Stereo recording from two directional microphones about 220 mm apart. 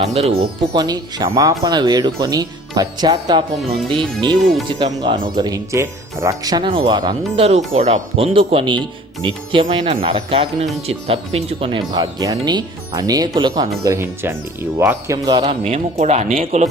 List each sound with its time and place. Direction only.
0.0 s speech: 30° right (ahead or behind)
0.8 s a man's voice: 15° right (ahead or behind)
15.6 s speech: 30° right (ahead or behind)